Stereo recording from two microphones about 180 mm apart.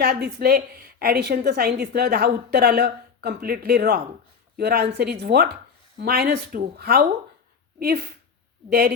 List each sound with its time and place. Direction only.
0.0 s a woman's voice: 65° right (ahead or behind)